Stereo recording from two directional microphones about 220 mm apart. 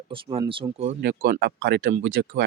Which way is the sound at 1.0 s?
45° right (ahead or behind).